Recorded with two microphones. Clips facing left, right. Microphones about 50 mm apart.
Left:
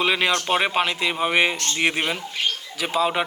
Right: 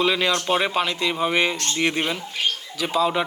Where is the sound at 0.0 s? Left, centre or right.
Left.